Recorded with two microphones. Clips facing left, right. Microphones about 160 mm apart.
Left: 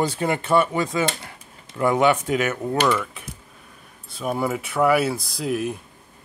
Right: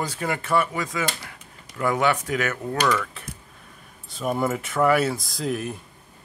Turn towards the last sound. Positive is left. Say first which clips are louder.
# left 3 dB
turn(degrees=5)  # may be behind; listen again after turning